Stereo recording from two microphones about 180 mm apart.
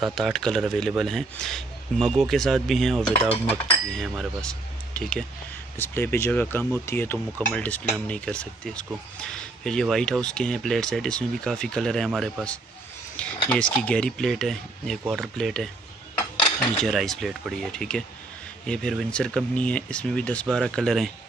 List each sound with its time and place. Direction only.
0.0 s speech: centre (ahead or behind)
16.2 s a sound: 25° left (ahead or behind)
16.5 s speech: centre (ahead or behind)